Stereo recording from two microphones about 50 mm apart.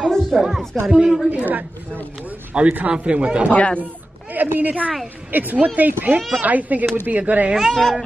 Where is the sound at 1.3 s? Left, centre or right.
Right.